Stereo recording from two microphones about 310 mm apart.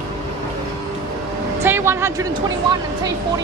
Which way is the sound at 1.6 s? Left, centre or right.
Centre.